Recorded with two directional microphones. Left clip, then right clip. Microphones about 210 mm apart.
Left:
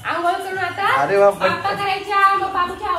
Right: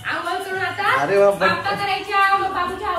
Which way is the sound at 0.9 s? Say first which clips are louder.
Left 1 dB; 10° right (ahead or behind).